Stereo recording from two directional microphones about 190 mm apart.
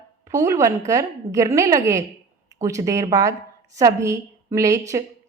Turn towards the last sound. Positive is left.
turn(degrees=-15)  # may be behind; listen again after turning